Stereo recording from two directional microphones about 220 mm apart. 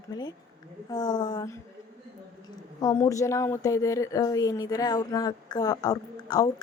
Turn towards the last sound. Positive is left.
turn(degrees=20)  # may be behind; listen again after turning